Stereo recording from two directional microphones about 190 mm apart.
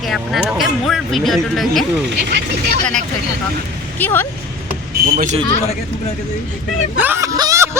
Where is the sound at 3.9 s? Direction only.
10° left (ahead or behind).